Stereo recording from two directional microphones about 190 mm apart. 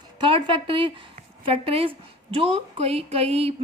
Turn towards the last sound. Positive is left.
turn(degrees=-30)  # may be behind; listen again after turning